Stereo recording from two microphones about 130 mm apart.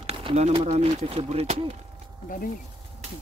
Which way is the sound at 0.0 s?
50° right (ahead or behind).